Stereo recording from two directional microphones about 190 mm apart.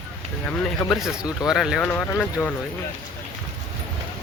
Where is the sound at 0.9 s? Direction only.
Centre (ahead or behind).